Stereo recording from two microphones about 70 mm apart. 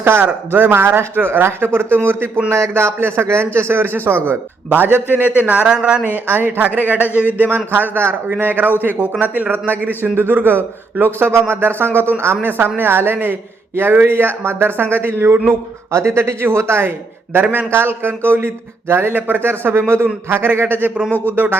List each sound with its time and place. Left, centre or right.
0.0 s a man's voice: right; by 6.0 s centre
6.0 s a man's voice: right
17.3 s a man's voice: right